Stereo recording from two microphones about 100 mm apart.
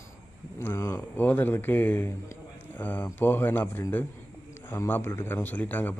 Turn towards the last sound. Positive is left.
turn(degrees=15)  # may be behind; listen again after turning